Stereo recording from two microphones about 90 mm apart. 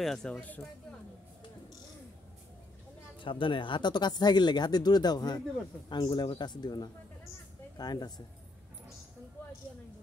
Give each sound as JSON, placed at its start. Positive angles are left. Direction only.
{"t": 0.0, "sound": "speech", "side_deg": 5}
{"t": 3.2, "sound": "speech", "side_deg": 70}
{"t": 6.3, "sound": "speech", "side_deg": 55}